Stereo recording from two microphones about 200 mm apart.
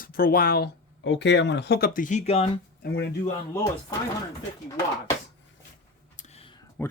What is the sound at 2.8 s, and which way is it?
Speech, 60° left (ahead or behind).